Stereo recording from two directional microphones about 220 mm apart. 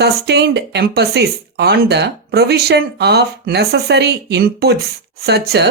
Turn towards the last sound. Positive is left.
turn(degrees=-50)  # may be behind; listen again after turning